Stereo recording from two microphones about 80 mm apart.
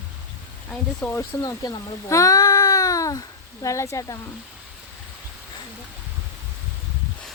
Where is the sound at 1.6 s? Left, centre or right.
Left.